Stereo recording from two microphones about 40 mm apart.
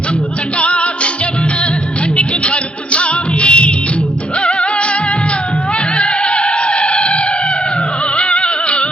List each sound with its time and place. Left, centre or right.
0.6 s music: left
2.1 s music: left
6.0 s music: left